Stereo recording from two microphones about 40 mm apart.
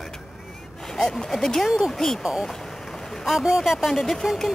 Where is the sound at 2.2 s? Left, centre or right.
Centre.